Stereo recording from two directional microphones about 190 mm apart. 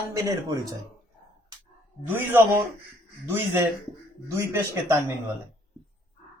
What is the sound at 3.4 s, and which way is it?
Speech, 10° right (ahead or behind).